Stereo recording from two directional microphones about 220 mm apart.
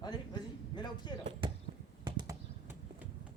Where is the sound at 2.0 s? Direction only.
15° right (ahead or behind).